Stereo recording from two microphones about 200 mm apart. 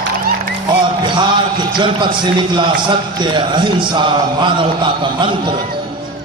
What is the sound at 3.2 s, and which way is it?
A man's voice, 25° right (ahead or behind).